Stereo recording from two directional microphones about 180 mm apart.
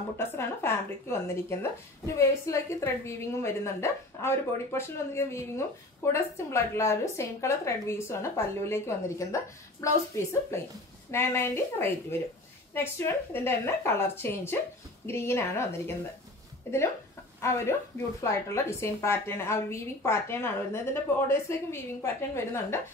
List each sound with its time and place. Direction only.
0.2 s a woman's voice: 15° left (ahead or behind)
16.7 s a woman's voice: 15° left (ahead or behind)